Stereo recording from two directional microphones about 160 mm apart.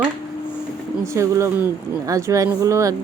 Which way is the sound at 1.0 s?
20° right (ahead or behind).